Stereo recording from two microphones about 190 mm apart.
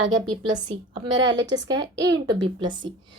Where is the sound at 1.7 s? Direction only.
20° right (ahead or behind).